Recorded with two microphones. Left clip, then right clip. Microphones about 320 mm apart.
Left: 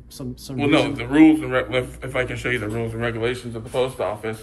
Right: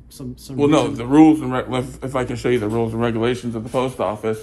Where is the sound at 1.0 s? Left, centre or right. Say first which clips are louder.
Right 2 dB; centre.